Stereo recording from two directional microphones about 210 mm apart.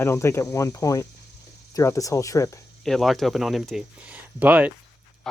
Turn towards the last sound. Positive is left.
turn(degrees=-10)  # may be behind; listen again after turning